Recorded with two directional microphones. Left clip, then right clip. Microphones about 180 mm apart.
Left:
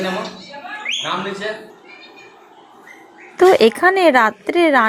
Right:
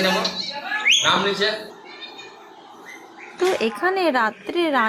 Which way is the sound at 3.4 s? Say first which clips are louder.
Left 10 dB; 25° left (ahead or behind).